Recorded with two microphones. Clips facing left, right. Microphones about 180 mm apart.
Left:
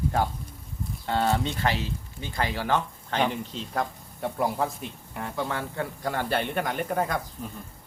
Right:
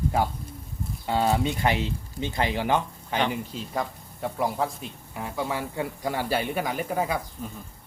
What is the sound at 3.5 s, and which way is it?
Speech, centre (ahead or behind).